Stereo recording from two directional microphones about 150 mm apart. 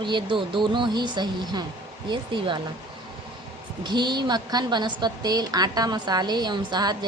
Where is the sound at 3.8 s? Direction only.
30° right (ahead or behind).